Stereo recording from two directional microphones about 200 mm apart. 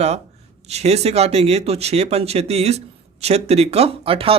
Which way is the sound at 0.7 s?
30° right (ahead or behind).